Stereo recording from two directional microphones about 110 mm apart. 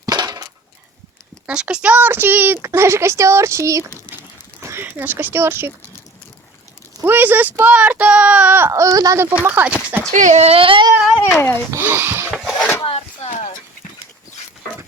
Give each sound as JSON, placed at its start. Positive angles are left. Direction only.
{"t": 0.0, "sound": "a sound", "side_deg": -35}
{"t": 1.5, "sound": "speech", "side_deg": -10}
{"t": 7.0, "sound": "speech", "side_deg": -20}
{"t": 9.3, "sound": "speech", "side_deg": -15}
{"t": 10.1, "sound": "speech", "side_deg": -85}
{"t": 11.2, "sound": "speech", "side_deg": 20}
{"t": 11.7, "sound": "speech", "side_deg": -20}
{"t": 12.4, "sound": "a sound", "side_deg": 0}
{"t": 12.8, "sound": "a sound", "side_deg": 70}